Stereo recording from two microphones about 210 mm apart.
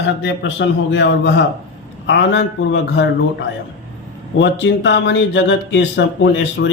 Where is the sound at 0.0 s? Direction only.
60° left (ahead or behind).